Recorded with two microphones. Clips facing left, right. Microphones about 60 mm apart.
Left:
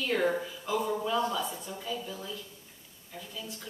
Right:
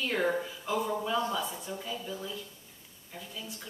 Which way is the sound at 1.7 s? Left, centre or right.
Centre.